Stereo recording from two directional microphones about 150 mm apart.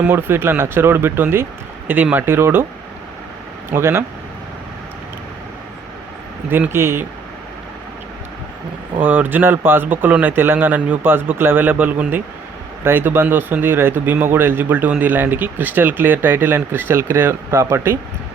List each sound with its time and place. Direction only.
0.0 s speech: 15° right (ahead or behind)
3.7 s speech: 15° right (ahead or behind)
6.5 s speech: 15° right (ahead or behind)
9.0 s speech: 10° right (ahead or behind)